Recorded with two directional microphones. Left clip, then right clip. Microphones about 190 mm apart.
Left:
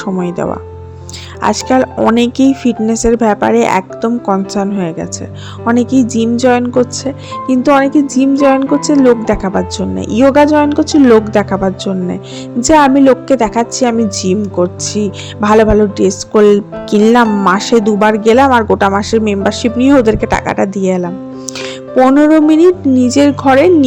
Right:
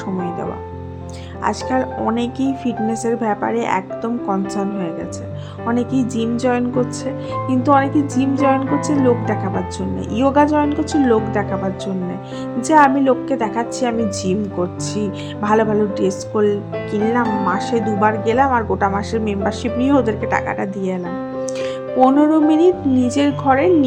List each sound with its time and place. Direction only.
1.4 s a woman's voice: 40° left (ahead or behind)
21.6 s music: 35° left (ahead or behind)
22.3 s a woman's voice: 35° left (ahead or behind)